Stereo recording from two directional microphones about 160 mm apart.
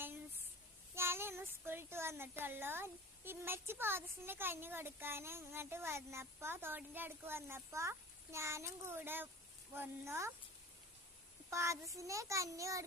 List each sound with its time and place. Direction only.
0.9 s child singing: 15° right (ahead or behind)
2.4 s speech: 15° right (ahead or behind)
11.5 s a child's voice: 20° right (ahead or behind)